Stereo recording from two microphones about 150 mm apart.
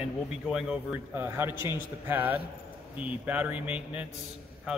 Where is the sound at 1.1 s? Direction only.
15° right (ahead or behind).